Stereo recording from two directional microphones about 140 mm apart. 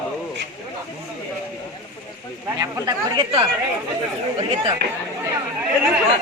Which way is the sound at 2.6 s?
25° right (ahead or behind).